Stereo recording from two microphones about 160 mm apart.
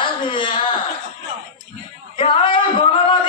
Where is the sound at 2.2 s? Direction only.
30° left (ahead or behind).